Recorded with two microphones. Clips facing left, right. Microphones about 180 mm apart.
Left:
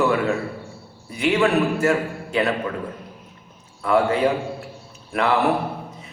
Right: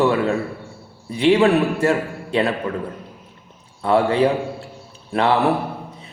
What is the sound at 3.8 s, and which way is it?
Speech, 30° right (ahead or behind).